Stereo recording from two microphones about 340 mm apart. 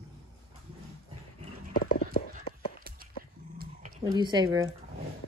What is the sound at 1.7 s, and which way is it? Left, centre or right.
Clip-clop, left.